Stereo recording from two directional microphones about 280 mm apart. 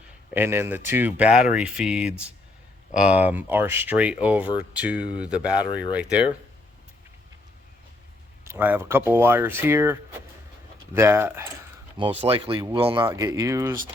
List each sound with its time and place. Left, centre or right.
0.3 s speech: centre
8.4 s speech: centre